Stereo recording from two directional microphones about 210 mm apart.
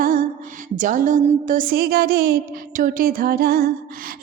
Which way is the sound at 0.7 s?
40° right (ahead or behind).